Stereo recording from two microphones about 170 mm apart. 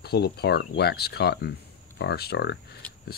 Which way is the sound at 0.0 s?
70° left (ahead or behind).